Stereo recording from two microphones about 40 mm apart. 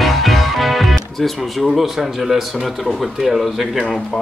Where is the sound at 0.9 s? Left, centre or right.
Centre.